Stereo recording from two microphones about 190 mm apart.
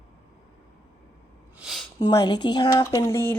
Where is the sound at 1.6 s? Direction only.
Centre (ahead or behind).